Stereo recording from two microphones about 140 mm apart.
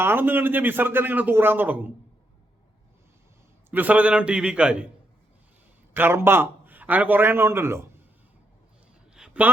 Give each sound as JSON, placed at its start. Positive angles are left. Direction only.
{"t": 0.0, "sound": "a man's voice", "side_deg": -15}
{"t": 3.7, "sound": "a man's voice", "side_deg": -10}
{"t": 5.9, "sound": "a man's voice", "side_deg": -15}
{"t": 9.1, "sound": "a sound", "side_deg": -5}